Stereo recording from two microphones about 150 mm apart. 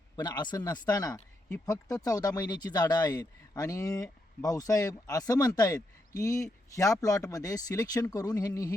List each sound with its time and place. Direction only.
0.2 s speech: 30° left (ahead or behind)